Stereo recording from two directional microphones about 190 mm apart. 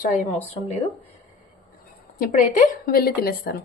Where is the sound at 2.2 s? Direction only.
45° left (ahead or behind).